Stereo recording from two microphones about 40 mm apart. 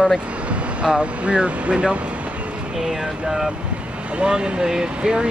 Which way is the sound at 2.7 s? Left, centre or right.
Centre.